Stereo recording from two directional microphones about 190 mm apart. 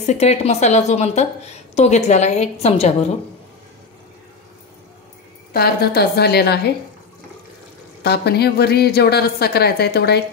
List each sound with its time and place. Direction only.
0.0 s a woman's voice: 35° left (ahead or behind)
5.5 s speech: 55° left (ahead or behind)
8.0 s speech: 60° left (ahead or behind)